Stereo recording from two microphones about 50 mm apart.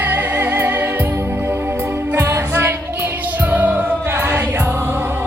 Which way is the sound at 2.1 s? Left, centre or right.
Right.